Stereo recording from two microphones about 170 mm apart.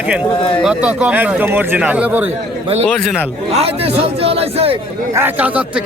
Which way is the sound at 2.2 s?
40° right (ahead or behind).